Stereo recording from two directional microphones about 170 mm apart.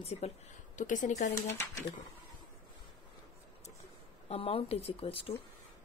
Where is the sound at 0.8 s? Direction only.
45° left (ahead or behind).